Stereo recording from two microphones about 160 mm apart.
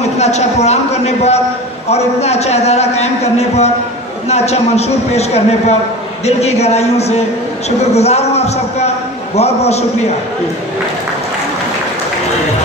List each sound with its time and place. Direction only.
0.0 s a man's voice: 45° left (ahead or behind)